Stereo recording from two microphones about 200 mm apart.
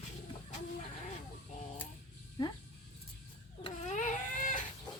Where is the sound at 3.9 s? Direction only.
40° left (ahead or behind).